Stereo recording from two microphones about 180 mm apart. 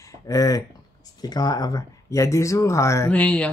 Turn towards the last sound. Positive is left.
turn(degrees=5)  # may be behind; listen again after turning